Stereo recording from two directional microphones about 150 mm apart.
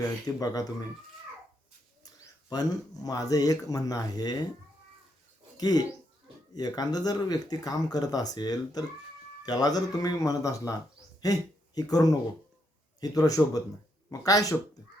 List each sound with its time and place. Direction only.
0.3 s speech: 25° left (ahead or behind)
2.0 s speech: 25° left (ahead or behind)
5.5 s speech: 25° left (ahead or behind)